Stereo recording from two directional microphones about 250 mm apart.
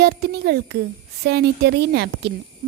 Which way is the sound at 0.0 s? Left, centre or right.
Right.